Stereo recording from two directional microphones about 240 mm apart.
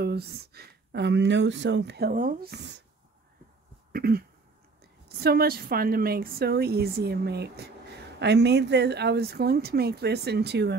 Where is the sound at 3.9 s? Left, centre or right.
Right.